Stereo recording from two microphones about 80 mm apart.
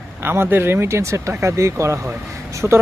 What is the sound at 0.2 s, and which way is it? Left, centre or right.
Speech, right.